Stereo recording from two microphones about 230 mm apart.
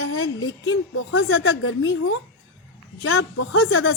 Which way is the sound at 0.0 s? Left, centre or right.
Left.